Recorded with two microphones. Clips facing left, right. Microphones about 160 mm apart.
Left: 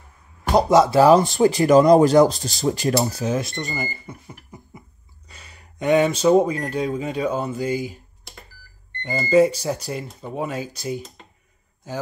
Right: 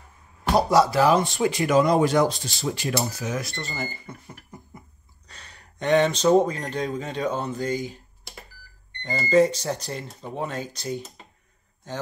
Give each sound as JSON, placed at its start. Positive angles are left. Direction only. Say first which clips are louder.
{"t": 0.5, "sound": "speech", "louder": "left 3 dB", "side_deg": 20}
{"t": 9.3, "sound": "speech", "louder": "left 3 dB", "side_deg": 10}